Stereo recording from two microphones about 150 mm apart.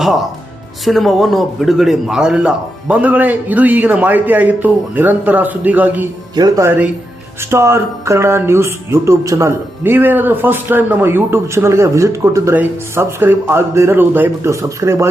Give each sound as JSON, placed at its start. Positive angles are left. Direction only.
{"t": 0.9, "sound": "speech", "side_deg": 0}
{"t": 6.3, "sound": "speech", "side_deg": -20}